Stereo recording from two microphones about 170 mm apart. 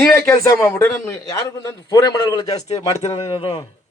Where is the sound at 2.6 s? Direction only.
35° left (ahead or behind).